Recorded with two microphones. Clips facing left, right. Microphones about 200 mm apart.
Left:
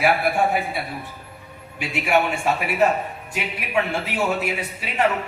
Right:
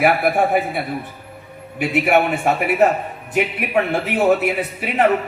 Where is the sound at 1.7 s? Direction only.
55° right (ahead or behind).